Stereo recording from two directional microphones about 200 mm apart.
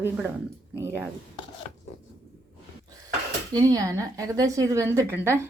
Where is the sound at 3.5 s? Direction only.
20° right (ahead or behind).